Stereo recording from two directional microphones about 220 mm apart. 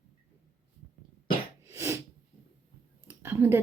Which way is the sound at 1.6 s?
10° right (ahead or behind).